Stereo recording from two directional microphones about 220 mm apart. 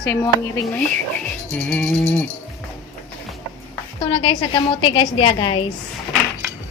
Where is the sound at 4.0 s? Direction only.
25° left (ahead or behind).